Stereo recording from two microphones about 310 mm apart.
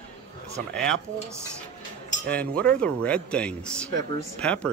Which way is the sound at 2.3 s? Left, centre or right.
Centre.